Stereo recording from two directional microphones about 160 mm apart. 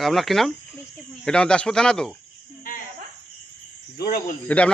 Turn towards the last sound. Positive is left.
turn(degrees=10)  # may be behind; listen again after turning